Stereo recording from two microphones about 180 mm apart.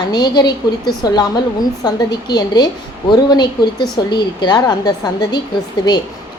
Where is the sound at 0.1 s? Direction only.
25° left (ahead or behind).